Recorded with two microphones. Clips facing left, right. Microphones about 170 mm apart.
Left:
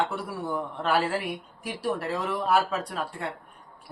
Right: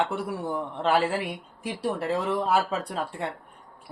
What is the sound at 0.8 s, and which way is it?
Speech, 25° right (ahead or behind).